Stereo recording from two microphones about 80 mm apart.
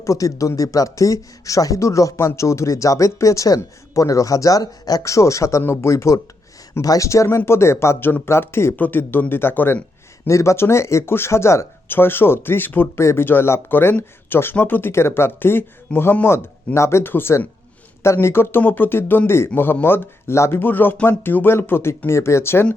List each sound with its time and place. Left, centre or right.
0.0 s speech: left